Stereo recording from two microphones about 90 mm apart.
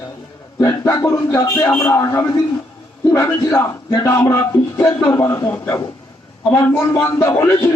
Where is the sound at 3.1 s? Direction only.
35° left (ahead or behind).